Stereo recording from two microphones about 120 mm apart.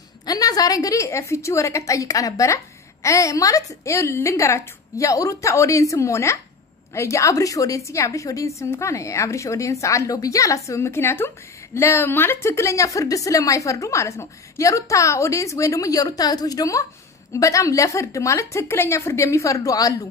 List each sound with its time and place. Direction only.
0.2 s a woman's voice: 30° left (ahead or behind)